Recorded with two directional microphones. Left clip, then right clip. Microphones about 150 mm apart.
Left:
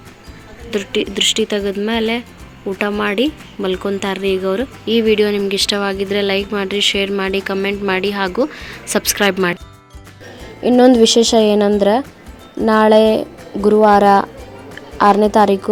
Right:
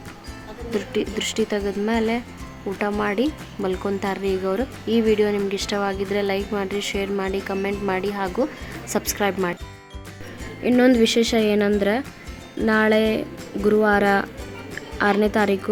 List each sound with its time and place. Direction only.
0.7 s speech: 20° left (ahead or behind)
10.6 s a woman's voice: 25° left (ahead or behind)